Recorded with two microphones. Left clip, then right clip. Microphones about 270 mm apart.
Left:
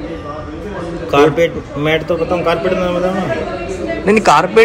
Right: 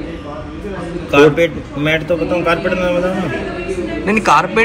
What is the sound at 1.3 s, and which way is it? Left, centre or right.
Speech, centre.